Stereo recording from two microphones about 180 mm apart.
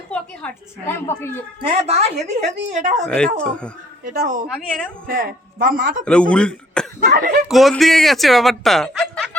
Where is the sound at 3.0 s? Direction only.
5° left (ahead or behind).